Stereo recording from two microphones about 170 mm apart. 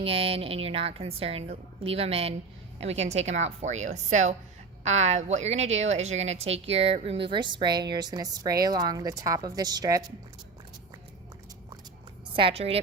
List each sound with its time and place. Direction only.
0.0 s a woman's voice: 35° right (ahead or behind)
12.3 s a woman's voice: 30° right (ahead or behind)